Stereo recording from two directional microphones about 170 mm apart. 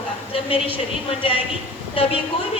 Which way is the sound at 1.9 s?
35° left (ahead or behind).